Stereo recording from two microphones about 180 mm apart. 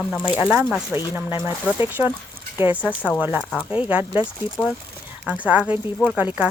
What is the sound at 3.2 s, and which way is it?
Speech, 10° right (ahead or behind).